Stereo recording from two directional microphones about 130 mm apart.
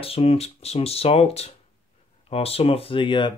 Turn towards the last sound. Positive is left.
turn(degrees=40)  # may be behind; listen again after turning